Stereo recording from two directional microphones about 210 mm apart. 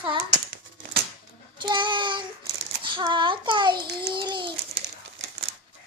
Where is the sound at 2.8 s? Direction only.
20° right (ahead or behind).